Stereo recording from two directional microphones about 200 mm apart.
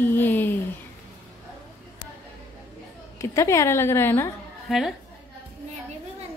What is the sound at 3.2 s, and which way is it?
A woman's voice, 15° left (ahead or behind).